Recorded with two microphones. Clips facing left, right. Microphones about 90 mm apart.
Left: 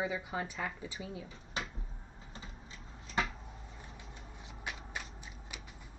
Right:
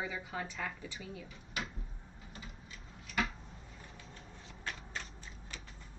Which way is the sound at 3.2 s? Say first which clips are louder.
Left 1 dB; 30° left (ahead or behind).